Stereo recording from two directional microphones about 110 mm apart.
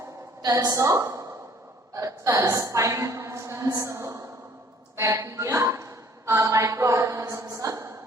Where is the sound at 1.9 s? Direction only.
30° right (ahead or behind).